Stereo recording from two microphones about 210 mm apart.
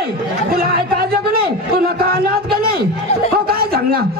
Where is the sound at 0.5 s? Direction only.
45° right (ahead or behind).